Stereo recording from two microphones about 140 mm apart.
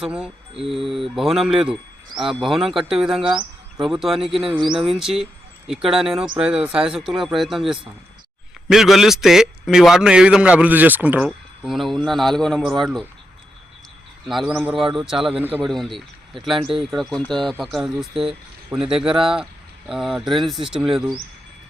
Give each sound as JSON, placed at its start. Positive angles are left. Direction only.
{"t": 0.0, "sound": "mantra", "side_deg": -5}
{"t": 0.7, "sound": "speech", "side_deg": 0}
{"t": 11.3, "sound": "speech", "side_deg": 0}
{"t": 14.3, "sound": "speech", "side_deg": 0}
{"t": 15.6, "sound": "speech", "side_deg": 0}
{"t": 19.0, "sound": "speech", "side_deg": -40}
{"t": 19.9, "sound": "speech", "side_deg": -5}